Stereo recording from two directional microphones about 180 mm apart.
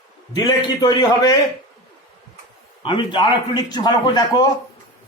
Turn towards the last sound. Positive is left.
turn(degrees=25)  # may be behind; listen again after turning